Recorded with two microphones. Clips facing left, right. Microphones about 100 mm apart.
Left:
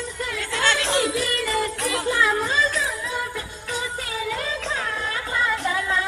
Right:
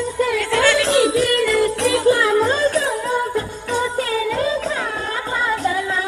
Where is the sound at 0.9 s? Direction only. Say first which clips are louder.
Right 7 dB; 50° right (ahead or behind).